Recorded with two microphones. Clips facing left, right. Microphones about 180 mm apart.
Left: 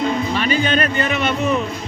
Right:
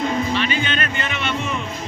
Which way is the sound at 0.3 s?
40° left (ahead or behind).